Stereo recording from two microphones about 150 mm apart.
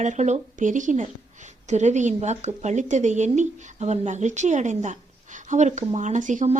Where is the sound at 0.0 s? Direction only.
50° right (ahead or behind).